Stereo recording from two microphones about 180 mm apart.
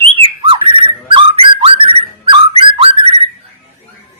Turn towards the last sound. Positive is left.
turn(degrees=-30)  # may be behind; listen again after turning